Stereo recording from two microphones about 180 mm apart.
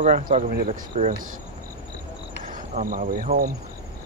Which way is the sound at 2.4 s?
45° right (ahead or behind).